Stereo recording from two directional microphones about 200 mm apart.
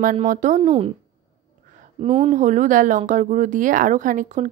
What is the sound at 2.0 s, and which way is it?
Speech, 25° right (ahead or behind).